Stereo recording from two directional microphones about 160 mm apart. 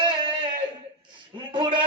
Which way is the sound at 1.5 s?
30° right (ahead or behind).